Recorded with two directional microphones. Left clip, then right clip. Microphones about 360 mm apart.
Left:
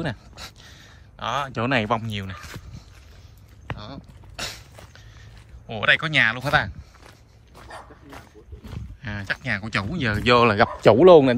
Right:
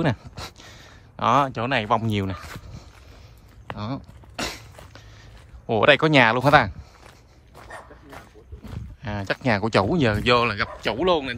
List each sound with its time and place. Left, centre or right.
0.0 s a sound: centre
5.7 s speech: centre
7.5 s bow-wow: centre
8.6 s speech: centre